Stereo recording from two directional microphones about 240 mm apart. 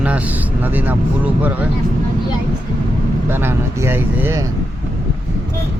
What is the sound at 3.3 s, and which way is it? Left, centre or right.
Speech, centre.